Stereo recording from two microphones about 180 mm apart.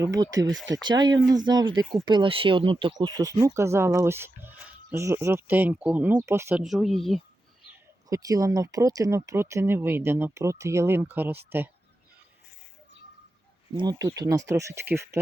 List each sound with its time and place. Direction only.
0.0 s speech: 20° right (ahead or behind); by 7.2 s centre (ahead or behind)
8.1 s speech: 20° right (ahead or behind)
13.7 s speech: 20° right (ahead or behind)